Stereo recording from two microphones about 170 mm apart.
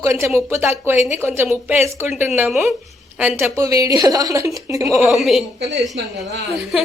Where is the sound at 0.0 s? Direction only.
15° right (ahead or behind).